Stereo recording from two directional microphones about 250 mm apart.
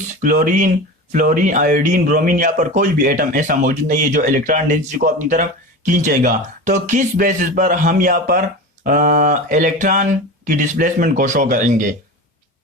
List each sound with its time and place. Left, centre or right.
0.2 s speech: right